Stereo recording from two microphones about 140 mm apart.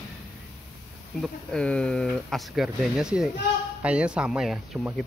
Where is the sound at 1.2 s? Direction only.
5° left (ahead or behind).